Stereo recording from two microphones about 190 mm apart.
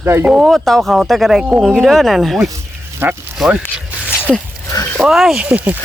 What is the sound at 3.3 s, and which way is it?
Zipper, 5° right (ahead or behind).